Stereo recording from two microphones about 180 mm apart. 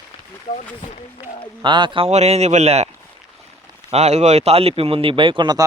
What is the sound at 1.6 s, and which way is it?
A man's voice, 25° right (ahead or behind).